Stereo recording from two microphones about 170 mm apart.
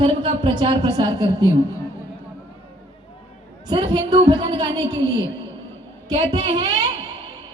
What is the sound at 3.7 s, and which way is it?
Speech, 25° right (ahead or behind).